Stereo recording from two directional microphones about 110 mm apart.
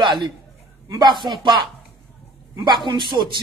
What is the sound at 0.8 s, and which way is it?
A man's voice, 35° right (ahead or behind).